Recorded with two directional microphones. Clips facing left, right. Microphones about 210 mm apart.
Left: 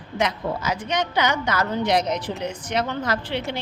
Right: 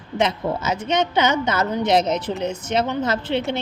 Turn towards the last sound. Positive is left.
turn(degrees=-25)  # may be behind; listen again after turning